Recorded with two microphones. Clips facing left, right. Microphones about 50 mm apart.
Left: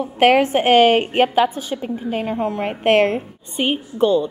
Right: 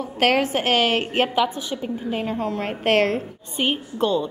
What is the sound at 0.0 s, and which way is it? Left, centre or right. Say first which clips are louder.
A woman's voice: left 5 dB; left.